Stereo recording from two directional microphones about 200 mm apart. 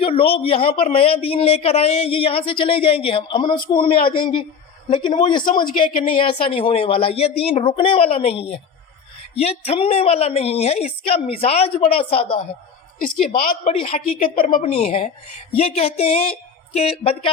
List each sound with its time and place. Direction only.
0.0 s a woman's voice: 30° left (ahead or behind)
13.0 s a woman's voice: 45° left (ahead or behind)
13.7 s a woman's voice: 30° left (ahead or behind)
14.1 s a woman's voice: 45° left (ahead or behind); by 17.3 s 30° left (ahead or behind)